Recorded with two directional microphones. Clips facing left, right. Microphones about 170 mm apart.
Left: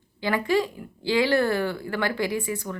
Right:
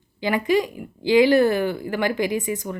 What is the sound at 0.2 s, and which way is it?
A woman's voice, 15° right (ahead or behind).